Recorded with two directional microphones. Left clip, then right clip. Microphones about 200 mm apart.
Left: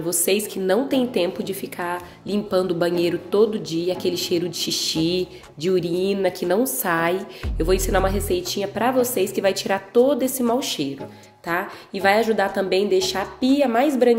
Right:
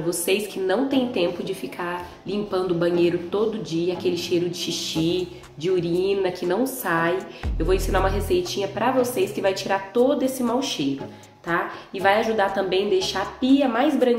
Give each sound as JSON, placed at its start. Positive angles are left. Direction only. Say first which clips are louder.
{"t": 0.1, "sound": "a woman's voice", "louder": "left 2 dB", "side_deg": 45}